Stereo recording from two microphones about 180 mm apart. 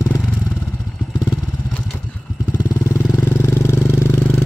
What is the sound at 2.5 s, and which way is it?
Motorcycle, 15° left (ahead or behind).